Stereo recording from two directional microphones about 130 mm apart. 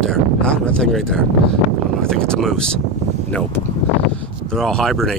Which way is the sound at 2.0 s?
5° left (ahead or behind).